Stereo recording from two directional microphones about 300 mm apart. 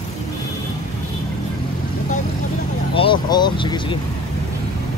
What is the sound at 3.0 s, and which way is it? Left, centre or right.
Speech, centre.